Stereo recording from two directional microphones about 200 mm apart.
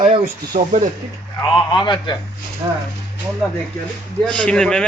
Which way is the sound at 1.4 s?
20° left (ahead or behind).